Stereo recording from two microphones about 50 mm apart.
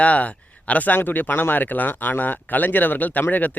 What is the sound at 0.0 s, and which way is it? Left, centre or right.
Speech, left.